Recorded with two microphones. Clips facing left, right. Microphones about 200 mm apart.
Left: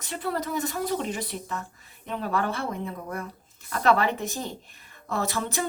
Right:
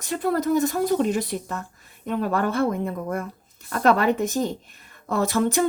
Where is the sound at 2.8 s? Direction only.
50° right (ahead or behind).